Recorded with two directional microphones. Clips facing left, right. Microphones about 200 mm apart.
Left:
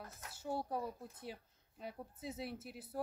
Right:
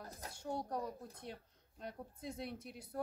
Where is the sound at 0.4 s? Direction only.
5° left (ahead or behind).